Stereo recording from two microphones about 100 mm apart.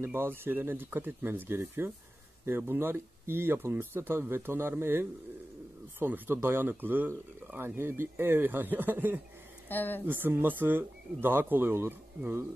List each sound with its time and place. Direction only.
0.0 s speech: 25° right (ahead or behind)
9.7 s speech: 20° left (ahead or behind)
10.0 s speech: 20° right (ahead or behind)